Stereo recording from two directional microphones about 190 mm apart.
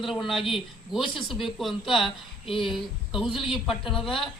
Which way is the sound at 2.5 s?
25° left (ahead or behind).